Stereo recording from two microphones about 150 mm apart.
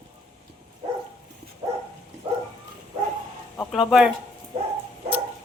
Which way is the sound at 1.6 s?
30° right (ahead or behind).